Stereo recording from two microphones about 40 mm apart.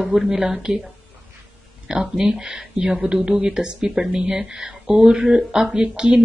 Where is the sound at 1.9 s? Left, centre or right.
Centre.